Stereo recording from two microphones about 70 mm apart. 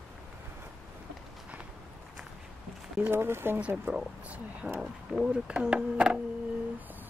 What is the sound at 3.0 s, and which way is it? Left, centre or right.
Speech, right.